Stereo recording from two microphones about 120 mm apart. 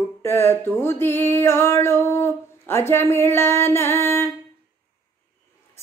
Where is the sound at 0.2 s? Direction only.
20° left (ahead or behind).